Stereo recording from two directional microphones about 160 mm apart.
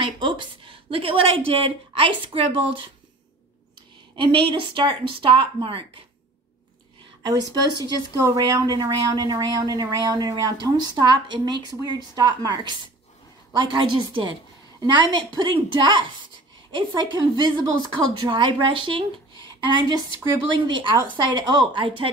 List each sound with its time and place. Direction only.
0.0 s a woman's voice: 30° right (ahead or behind)
4.2 s speech: 30° right (ahead or behind)
7.2 s speech: 25° right (ahead or behind)